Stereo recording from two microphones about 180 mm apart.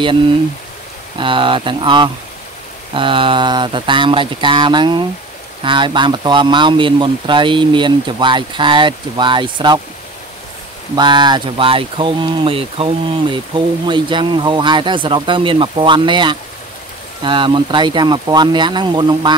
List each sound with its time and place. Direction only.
1.1 s speech: 30° right (ahead or behind)
11.0 s speech: 25° right (ahead or behind)